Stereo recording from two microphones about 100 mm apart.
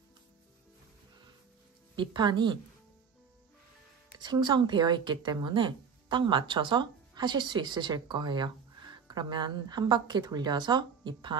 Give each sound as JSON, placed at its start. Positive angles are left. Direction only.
{"t": 2.0, "sound": "speech", "side_deg": -50}
{"t": 4.2, "sound": "speech", "side_deg": -45}